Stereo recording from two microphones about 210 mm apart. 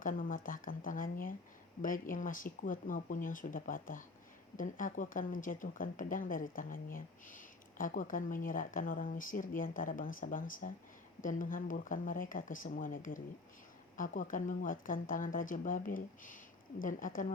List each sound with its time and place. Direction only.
0.0 s speech: 40° left (ahead or behind)